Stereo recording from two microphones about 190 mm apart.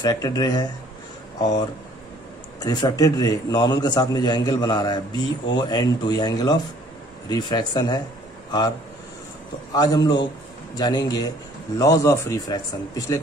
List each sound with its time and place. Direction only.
0.0 s a man's voice: 20° left (ahead or behind)
2.6 s a man's voice: 20° left (ahead or behind)
9.8 s a man's voice: 20° left (ahead or behind)